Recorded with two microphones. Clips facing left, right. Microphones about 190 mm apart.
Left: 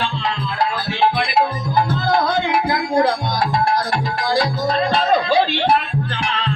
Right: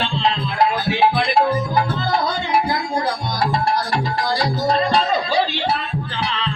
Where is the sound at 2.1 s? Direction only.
55° left (ahead or behind).